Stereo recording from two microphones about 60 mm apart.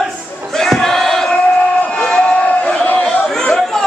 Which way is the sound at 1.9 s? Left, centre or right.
Centre.